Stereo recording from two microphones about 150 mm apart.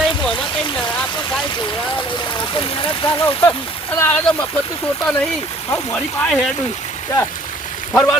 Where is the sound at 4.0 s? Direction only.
10° left (ahead or behind).